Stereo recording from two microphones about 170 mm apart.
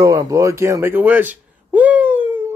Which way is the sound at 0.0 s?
20° right (ahead or behind).